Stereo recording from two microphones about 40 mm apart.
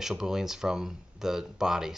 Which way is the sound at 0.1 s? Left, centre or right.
Centre.